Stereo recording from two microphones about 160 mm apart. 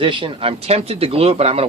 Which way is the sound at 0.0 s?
30° right (ahead or behind).